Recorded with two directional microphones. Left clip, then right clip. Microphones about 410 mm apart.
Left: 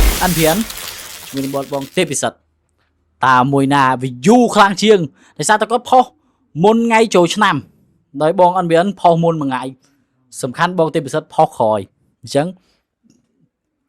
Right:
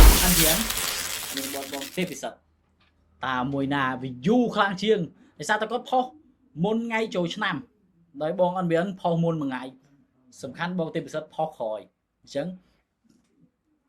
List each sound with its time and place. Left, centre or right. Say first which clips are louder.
0.6 s speech: left 2 dB; centre
2.0 s speech: left 15 dB; left
3.2 s speech: left 16 dB; left